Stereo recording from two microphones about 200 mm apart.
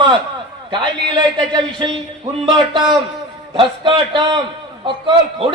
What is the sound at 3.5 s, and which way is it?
A man's voice, 25° right (ahead or behind).